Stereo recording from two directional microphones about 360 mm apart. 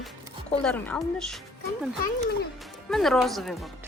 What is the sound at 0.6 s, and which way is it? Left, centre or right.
Speech, centre.